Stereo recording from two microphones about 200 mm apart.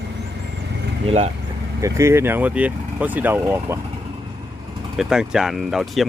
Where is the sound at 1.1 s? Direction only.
30° right (ahead or behind).